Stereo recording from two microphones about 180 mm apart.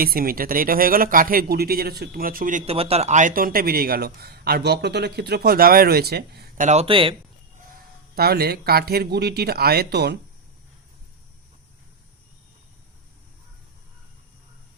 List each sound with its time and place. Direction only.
0.0 s speech: 55° right (ahead or behind)
6.7 s speech: 35° right (ahead or behind)
8.1 s speech: 60° right (ahead or behind)